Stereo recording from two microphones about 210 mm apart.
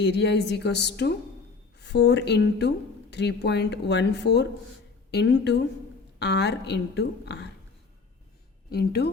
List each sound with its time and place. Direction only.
0.0 s a woman's voice: 55° left (ahead or behind)
8.7 s a woman's voice: 50° left (ahead or behind)